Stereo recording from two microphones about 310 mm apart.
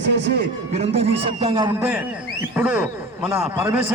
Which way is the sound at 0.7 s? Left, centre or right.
Centre.